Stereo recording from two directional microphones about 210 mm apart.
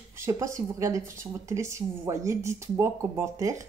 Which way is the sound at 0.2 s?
15° right (ahead or behind).